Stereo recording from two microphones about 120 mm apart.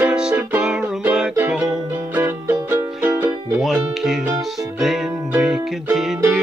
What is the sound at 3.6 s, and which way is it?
Music, centre (ahead or behind).